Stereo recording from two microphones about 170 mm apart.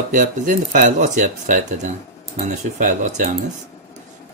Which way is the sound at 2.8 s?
45° right (ahead or behind).